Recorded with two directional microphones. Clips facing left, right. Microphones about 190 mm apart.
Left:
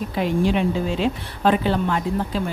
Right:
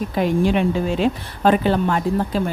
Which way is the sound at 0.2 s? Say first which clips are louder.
Right 2 dB; 50° right (ahead or behind).